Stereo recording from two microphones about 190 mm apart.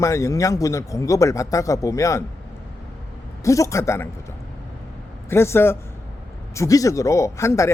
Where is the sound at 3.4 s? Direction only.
15° left (ahead or behind).